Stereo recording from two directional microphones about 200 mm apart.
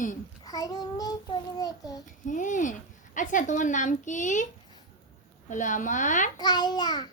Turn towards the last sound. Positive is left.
turn(degrees=20)  # may be behind; listen again after turning